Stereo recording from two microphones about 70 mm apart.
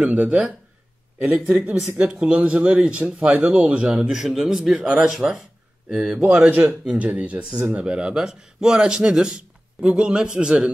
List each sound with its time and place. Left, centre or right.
0.0 s speech: centre